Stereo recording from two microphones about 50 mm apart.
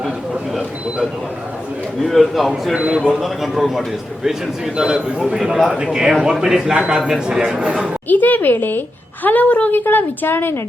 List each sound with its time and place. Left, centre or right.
2.0 s a man's voice: centre
2.7 s speech: centre
3.2 s speech: centre
8.0 s a woman's voice: left
9.7 s a woman's voice: left